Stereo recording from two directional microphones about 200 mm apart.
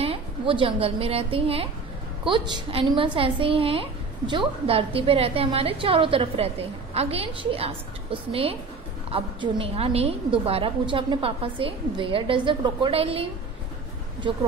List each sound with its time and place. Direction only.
0.0 s a woman's voice: 25° right (ahead or behind)